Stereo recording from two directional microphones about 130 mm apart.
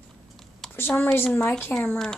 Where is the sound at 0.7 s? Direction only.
15° left (ahead or behind).